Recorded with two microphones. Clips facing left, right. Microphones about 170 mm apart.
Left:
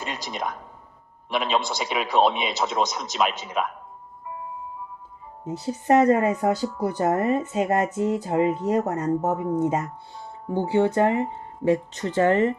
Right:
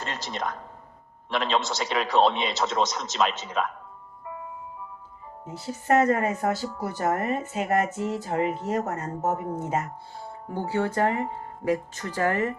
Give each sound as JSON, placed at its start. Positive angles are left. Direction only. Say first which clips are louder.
{"t": 0.0, "sound": "speech", "louder": "left 1 dB", "side_deg": 15}
{"t": 5.5, "sound": "speech", "louder": "left 4 dB", "side_deg": 20}